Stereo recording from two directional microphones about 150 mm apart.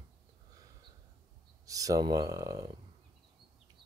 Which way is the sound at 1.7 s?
25° right (ahead or behind).